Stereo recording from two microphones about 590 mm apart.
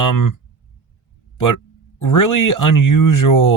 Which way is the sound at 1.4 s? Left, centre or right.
Left.